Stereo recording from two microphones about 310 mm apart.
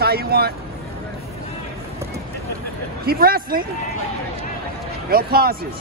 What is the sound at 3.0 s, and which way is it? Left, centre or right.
Speech, right.